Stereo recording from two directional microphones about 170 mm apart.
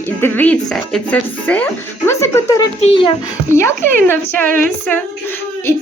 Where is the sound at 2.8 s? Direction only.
30° left (ahead or behind).